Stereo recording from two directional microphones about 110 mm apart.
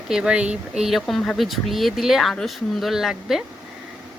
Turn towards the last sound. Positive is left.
turn(degrees=-5)  # may be behind; listen again after turning